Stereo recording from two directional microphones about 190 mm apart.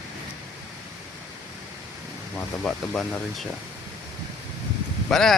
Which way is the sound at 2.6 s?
5° left (ahead or behind).